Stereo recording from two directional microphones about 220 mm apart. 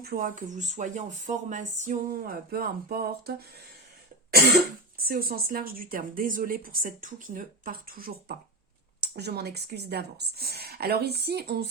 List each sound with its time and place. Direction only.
0.0 s speech: 40° right (ahead or behind)
5.0 s speech: 40° right (ahead or behind)